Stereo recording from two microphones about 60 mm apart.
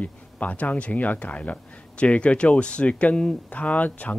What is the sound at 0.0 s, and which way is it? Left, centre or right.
Speech, left.